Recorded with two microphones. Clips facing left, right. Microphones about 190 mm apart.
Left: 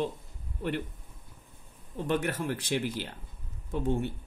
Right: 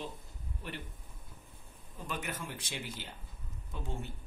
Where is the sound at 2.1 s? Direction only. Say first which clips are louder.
Left 11 dB; 60° left (ahead or behind).